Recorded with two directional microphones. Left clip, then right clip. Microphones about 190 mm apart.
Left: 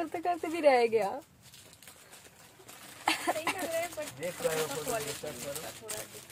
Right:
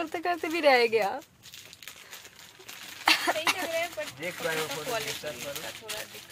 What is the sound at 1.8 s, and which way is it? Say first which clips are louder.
Crumpling: right 10 dB; 30° left (ahead or behind).